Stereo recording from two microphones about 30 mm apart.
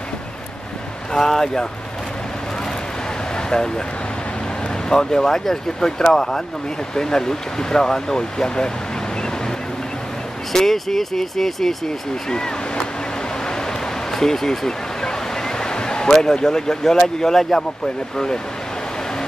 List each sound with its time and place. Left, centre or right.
1.1 s speech: centre
3.3 s speech: left
4.8 s speech: left
10.5 s speech: centre
12.3 s speech: left
13.5 s a sound: centre
17.2 s speech: centre